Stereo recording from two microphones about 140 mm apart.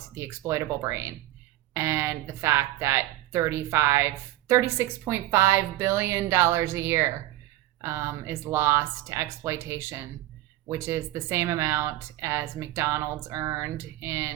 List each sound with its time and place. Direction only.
0.1 s speech: 20° right (ahead or behind)